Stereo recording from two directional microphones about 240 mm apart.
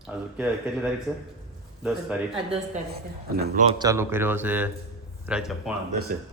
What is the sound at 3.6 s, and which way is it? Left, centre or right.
A man's voice, centre.